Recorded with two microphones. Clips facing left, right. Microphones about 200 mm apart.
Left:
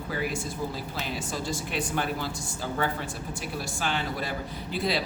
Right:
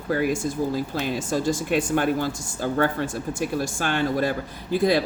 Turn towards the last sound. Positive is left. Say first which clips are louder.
# right 8 dB
turn(degrees=-50)  # may be behind; listen again after turning